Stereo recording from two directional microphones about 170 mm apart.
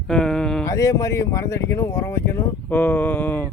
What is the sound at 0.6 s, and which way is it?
Speech, 20° left (ahead or behind).